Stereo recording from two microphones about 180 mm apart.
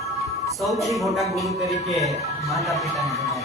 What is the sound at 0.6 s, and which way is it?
Speech, centre (ahead or behind).